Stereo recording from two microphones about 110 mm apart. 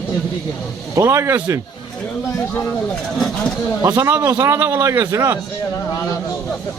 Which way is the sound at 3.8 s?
15° right (ahead or behind).